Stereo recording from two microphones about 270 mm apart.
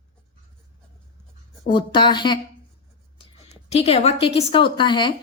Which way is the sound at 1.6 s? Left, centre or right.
Centre.